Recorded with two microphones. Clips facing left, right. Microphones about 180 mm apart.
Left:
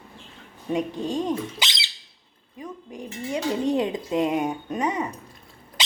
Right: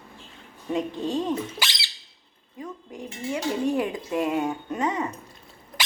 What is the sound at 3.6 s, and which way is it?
Speech, 20° left (ahead or behind).